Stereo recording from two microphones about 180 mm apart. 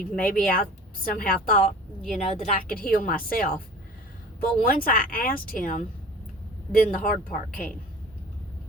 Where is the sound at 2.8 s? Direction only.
50° left (ahead or behind).